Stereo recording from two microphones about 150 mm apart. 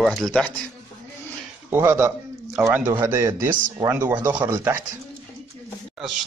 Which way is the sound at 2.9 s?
20° right (ahead or behind).